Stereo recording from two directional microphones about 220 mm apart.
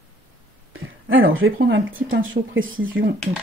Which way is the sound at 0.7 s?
65° right (ahead or behind).